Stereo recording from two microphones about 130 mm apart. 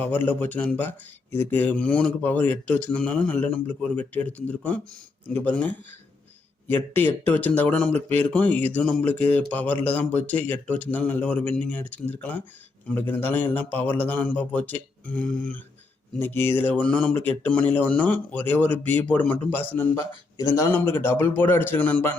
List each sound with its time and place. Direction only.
0.0 s speech: 15° left (ahead or behind)